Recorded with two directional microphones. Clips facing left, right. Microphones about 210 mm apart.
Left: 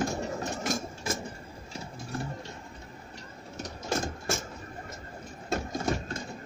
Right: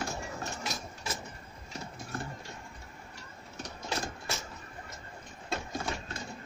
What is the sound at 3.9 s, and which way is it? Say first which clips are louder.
Engine: left 6 dB; 50° left (ahead or behind).